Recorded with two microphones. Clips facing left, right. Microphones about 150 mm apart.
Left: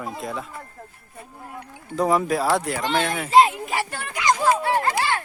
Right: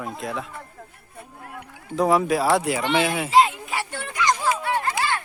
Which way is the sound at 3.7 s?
50° left (ahead or behind).